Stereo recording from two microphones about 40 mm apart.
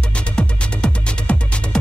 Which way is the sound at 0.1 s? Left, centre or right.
Left.